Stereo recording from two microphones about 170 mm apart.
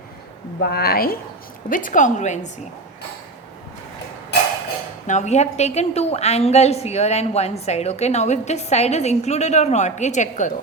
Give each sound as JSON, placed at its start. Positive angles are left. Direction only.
{"t": 0.6, "sound": "speech", "side_deg": 65}
{"t": 1.7, "sound": "a woman's voice", "side_deg": 50}
{"t": 5.0, "sound": "a woman's voice", "side_deg": 45}